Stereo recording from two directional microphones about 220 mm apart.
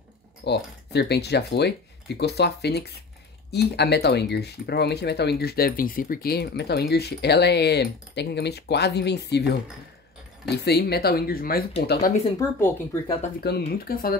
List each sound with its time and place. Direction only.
0.5 s speech: 50° left (ahead or behind)
12.4 s speech: 10° left (ahead or behind)
13.4 s speech: 45° left (ahead or behind)